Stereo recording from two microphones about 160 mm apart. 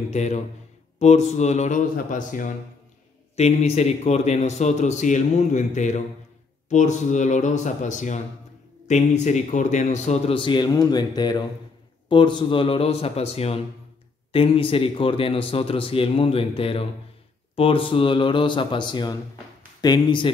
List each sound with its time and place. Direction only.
0.1 s a man's voice: 45° left (ahead or behind)
3.3 s a man's voice: 40° left (ahead or behind)